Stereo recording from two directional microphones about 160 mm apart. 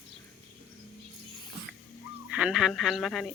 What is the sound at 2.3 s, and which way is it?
Speech, 5° right (ahead or behind).